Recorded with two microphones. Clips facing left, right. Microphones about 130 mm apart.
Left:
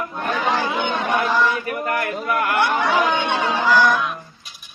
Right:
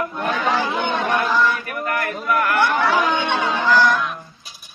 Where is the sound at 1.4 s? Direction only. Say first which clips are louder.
Left 1 dB; 25° left (ahead or behind).